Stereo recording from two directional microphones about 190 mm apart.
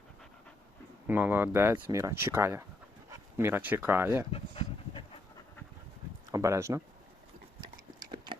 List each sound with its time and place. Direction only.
1.0 s speech: 10° right (ahead or behind)
4.3 s dog: 30° left (ahead or behind)
6.3 s speech: 15° right (ahead or behind)
8.1 s a sound: 25° right (ahead or behind)